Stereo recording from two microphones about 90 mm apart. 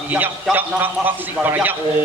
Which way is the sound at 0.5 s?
20° right (ahead or behind).